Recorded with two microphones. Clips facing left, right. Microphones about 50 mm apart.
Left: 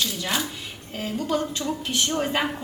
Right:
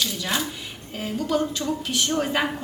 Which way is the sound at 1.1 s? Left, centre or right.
Left.